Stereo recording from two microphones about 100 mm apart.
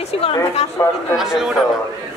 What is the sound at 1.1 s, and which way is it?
Speech, 5° right (ahead or behind).